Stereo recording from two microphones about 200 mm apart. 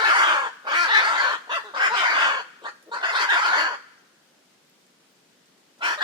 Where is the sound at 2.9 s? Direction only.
25° right (ahead or behind).